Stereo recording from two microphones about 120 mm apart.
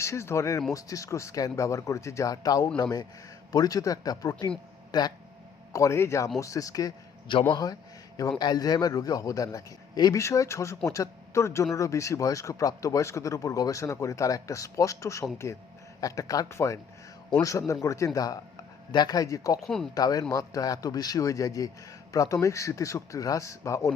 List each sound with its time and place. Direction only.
0.0 s a man's voice: 25° left (ahead or behind)
5.7 s speech: 25° left (ahead or behind)
7.5 s a sound: 35° left (ahead or behind)
8.4 s a man's voice: 35° left (ahead or behind)
19.6 s speech: 5° left (ahead or behind)
19.9 s a man's voice: 30° left (ahead or behind)